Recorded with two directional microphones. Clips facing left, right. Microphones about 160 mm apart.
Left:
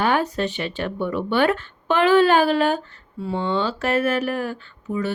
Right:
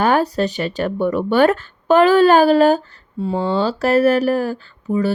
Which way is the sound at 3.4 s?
35° right (ahead or behind).